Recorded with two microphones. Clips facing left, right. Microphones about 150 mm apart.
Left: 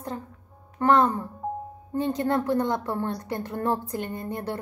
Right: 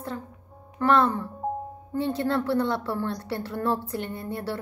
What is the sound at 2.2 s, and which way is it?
A woman's voice, 15° left (ahead or behind).